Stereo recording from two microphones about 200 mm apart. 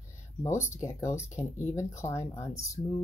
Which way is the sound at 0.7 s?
15° left (ahead or behind).